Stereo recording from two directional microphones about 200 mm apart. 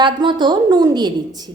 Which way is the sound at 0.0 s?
25° right (ahead or behind).